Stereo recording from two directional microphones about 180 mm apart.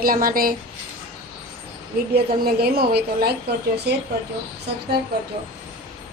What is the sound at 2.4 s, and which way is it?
Speech, 60° right (ahead or behind).